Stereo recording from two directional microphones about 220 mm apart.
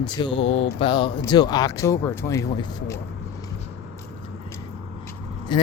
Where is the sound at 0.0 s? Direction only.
20° left (ahead or behind).